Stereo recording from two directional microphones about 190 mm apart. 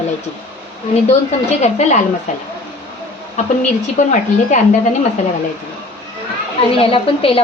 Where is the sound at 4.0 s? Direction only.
40° left (ahead or behind).